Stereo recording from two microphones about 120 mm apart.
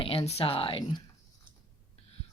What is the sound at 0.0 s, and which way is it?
Speech, 55° left (ahead or behind).